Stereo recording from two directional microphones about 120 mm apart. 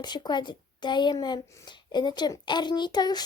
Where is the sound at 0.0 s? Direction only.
35° left (ahead or behind).